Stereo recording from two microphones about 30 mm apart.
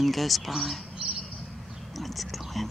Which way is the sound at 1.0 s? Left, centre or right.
Right.